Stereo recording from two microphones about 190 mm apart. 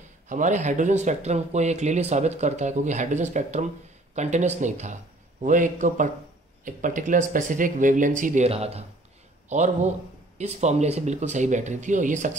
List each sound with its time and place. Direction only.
0.3 s speech: 40° right (ahead or behind)